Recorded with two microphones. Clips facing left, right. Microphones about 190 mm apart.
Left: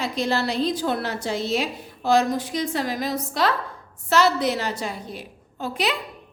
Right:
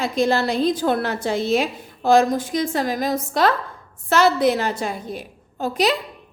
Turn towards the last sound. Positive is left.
turn(degrees=-40)  # may be behind; listen again after turning